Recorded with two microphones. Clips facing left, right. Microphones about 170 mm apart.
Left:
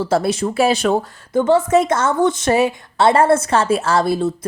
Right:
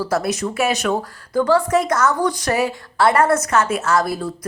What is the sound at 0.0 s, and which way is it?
A woman's voice, 30° left (ahead or behind).